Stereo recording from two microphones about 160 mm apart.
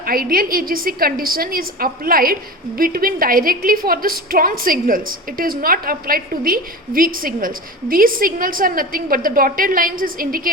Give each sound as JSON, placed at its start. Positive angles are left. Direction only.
{"t": 0.0, "sound": "a woman's voice", "side_deg": -65}